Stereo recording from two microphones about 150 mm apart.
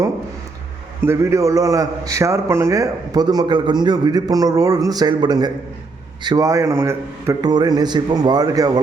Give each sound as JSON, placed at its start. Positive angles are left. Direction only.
{"t": 1.0, "sound": "a man's voice", "side_deg": -20}